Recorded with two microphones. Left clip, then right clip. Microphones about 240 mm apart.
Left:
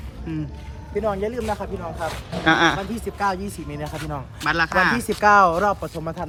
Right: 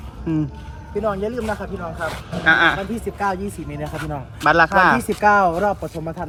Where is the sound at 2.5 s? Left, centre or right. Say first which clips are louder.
Right 3 dB; left.